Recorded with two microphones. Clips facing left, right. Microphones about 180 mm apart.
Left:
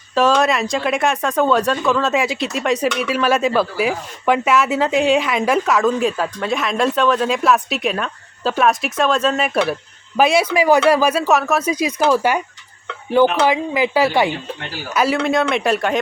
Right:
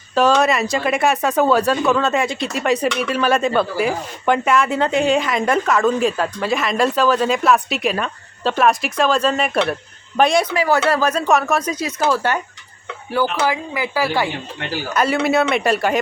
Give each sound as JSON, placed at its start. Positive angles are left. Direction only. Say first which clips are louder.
{"t": 0.1, "sound": "speech", "louder": "even", "side_deg": 0}
{"t": 11.7, "sound": "speech", "louder": "left 3 dB", "side_deg": 15}
{"t": 13.4, "sound": "a woman's voice", "louder": "left 4 dB", "side_deg": 20}
{"t": 14.9, "sound": "speech", "louder": "even", "side_deg": 0}